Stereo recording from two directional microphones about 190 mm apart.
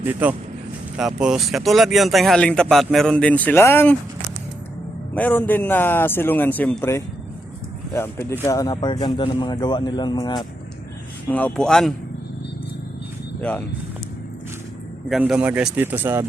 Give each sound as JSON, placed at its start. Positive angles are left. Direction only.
{"t": 0.0, "sound": "speech", "side_deg": -10}
{"t": 5.1, "sound": "a man's voice", "side_deg": 10}
{"t": 11.3, "sound": "speech", "side_deg": 10}
{"t": 15.1, "sound": "speech", "side_deg": -5}